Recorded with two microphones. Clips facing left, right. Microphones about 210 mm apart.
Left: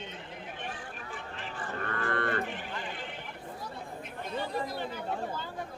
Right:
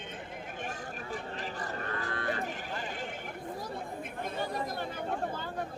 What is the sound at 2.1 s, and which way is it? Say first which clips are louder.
Cattle: left 5 dB; 65° left (ahead or behind).